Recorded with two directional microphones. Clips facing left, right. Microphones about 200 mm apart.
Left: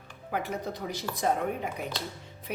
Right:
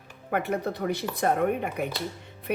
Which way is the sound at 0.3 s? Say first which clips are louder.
Right 5 dB; 60° right (ahead or behind).